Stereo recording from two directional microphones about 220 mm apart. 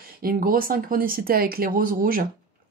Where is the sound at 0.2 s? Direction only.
40° right (ahead or behind).